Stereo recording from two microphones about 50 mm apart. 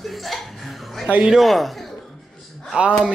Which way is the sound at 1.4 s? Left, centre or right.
Centre.